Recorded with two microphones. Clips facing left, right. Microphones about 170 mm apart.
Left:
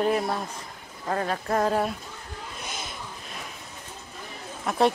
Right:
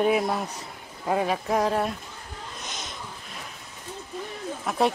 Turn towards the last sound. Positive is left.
turn(degrees=0)  # may be behind; listen again after turning